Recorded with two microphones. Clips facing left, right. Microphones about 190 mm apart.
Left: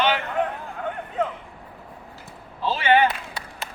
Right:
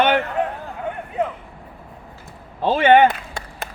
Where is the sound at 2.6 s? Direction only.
55° right (ahead or behind).